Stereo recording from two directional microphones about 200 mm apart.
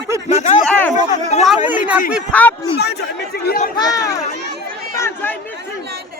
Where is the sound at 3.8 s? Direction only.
20° left (ahead or behind).